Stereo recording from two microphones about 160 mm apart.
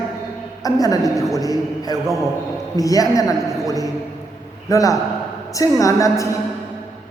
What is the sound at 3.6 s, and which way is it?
Chant, 20° left (ahead or behind).